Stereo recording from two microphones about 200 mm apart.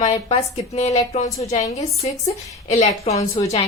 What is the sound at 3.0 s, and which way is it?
Speech, 30° left (ahead or behind).